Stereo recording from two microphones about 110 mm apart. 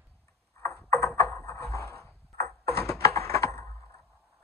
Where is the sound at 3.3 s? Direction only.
30° left (ahead or behind).